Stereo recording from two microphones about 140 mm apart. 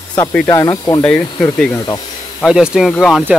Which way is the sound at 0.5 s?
25° left (ahead or behind).